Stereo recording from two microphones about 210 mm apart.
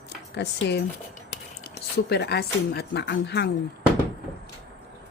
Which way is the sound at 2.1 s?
50° left (ahead or behind).